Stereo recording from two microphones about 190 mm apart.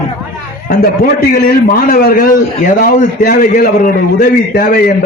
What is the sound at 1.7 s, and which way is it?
A man's voice, 50° left (ahead or behind).